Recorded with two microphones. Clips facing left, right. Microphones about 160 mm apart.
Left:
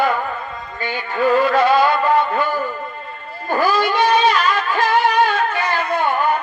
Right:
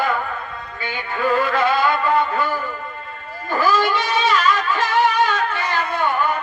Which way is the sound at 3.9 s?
45° left (ahead or behind).